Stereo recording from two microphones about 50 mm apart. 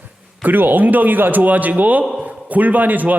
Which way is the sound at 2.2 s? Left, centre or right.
Right.